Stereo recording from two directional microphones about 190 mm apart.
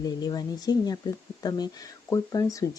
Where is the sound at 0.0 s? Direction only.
20° left (ahead or behind).